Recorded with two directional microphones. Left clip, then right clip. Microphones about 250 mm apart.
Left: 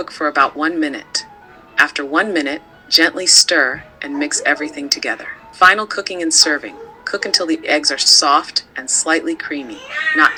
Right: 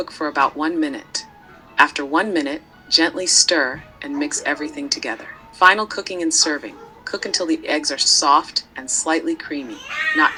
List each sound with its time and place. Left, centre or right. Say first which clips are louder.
0.0 s speech: left 4 dB; centre